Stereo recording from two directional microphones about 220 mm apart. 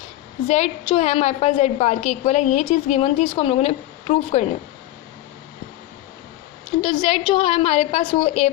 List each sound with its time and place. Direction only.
0.4 s a woman's voice: 30° left (ahead or behind)
6.8 s a woman's voice: 25° left (ahead or behind)